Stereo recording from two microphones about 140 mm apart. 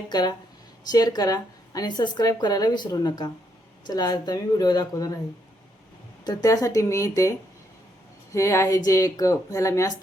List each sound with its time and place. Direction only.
0.1 s a woman's voice: 30° left (ahead or behind)
6.2 s a woman's voice: 25° left (ahead or behind)